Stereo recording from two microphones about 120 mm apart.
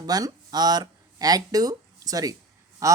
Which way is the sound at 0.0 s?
30° right (ahead or behind).